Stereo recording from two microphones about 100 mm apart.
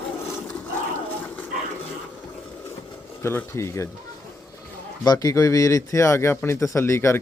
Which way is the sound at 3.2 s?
25° left (ahead or behind).